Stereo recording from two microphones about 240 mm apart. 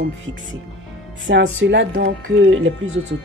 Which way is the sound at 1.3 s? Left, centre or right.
Right.